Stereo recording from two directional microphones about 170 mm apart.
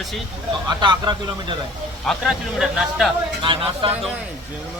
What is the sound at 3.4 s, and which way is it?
Speech, 30° right (ahead or behind).